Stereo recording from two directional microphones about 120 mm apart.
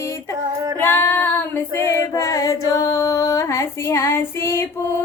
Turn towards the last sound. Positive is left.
turn(degrees=20)  # may be behind; listen again after turning